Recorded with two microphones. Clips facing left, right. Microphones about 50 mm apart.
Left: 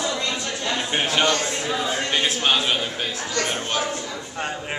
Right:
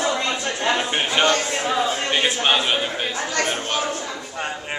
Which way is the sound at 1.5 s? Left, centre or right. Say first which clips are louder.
Right 4 dB; right.